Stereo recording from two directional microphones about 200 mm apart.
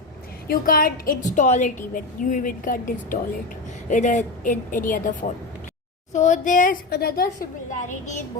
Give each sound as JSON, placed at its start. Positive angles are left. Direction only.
{"t": 0.4, "sound": "a woman's voice", "side_deg": 45}
{"t": 6.1, "sound": "a woman's voice", "side_deg": 40}